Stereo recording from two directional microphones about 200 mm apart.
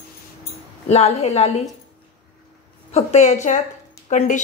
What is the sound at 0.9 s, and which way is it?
Speech, 30° left (ahead or behind).